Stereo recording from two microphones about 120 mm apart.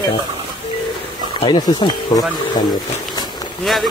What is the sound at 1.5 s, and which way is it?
Speech, 35° left (ahead or behind).